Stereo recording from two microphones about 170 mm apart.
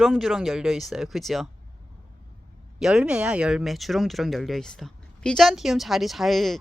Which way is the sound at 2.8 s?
5° right (ahead or behind).